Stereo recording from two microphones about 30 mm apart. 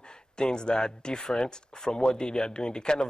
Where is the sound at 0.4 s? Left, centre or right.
Left.